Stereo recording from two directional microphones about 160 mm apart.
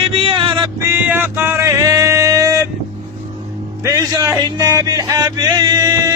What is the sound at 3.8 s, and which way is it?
Music, 20° right (ahead or behind).